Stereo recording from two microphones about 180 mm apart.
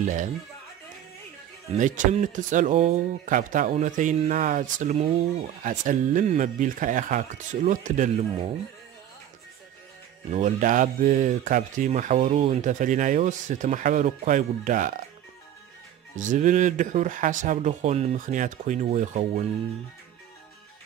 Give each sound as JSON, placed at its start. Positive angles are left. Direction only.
{"t": 0.0, "sound": "speech", "side_deg": -45}
{"t": 1.8, "sound": "speech", "side_deg": -45}
{"t": 10.3, "sound": "speech", "side_deg": -45}
{"t": 16.2, "sound": "speech", "side_deg": -45}